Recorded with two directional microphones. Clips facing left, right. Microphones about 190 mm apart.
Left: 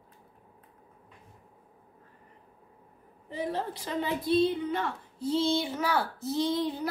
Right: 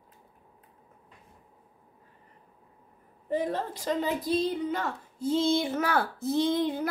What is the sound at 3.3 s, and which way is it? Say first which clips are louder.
A woman's voice: right 3 dB; 50° right (ahead or behind).